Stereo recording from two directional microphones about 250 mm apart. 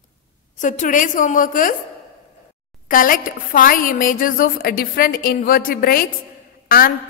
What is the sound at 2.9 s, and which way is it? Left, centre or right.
A woman's voice, left.